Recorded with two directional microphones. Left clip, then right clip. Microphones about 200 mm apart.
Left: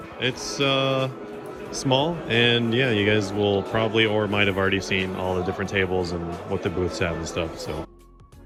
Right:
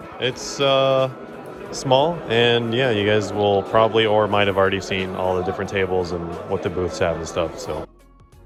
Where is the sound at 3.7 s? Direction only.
10° right (ahead or behind).